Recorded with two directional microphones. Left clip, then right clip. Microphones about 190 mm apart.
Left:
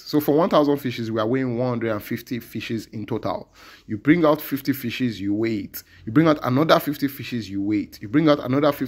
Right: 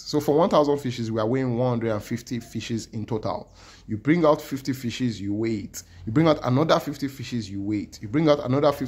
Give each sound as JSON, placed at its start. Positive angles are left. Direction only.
{"t": 0.1, "sound": "speech", "side_deg": 15}